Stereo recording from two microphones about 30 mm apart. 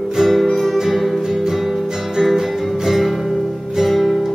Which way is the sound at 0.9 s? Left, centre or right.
Centre.